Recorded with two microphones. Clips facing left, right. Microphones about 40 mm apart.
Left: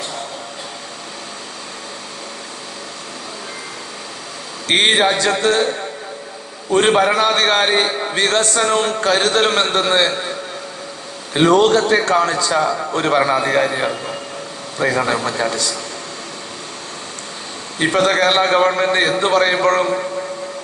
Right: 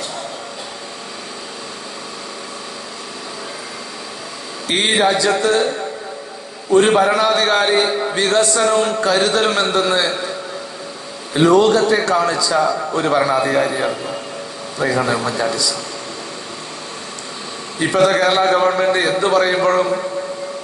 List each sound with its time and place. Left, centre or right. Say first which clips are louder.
4.7 s a man's voice: left 1 dB; left
6.7 s a man's voice: right 1 dB; left
11.3 s a man's voice: even; left
15.4 s a man's voice: right 1 dB; left
17.7 s a man's voice: right 1 dB; left